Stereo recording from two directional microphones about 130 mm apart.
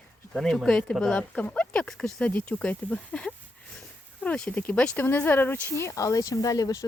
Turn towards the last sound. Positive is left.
turn(degrees=25)  # may be behind; listen again after turning